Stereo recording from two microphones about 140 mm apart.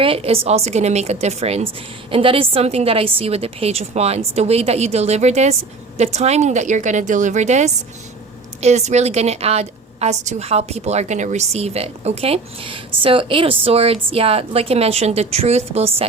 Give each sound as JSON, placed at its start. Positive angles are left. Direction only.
{"t": 0.0, "sound": "a woman's voice", "side_deg": -40}